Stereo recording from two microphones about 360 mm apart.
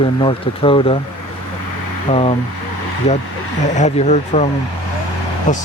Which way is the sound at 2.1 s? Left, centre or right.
Centre.